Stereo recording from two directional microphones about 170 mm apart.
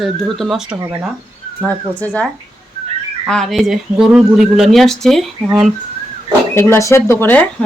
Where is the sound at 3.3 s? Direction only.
Centre (ahead or behind).